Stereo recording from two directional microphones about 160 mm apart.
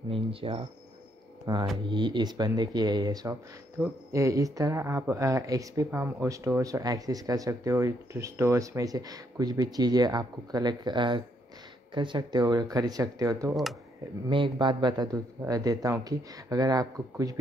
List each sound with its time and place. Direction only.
0.1 s speech: 35° right (ahead or behind)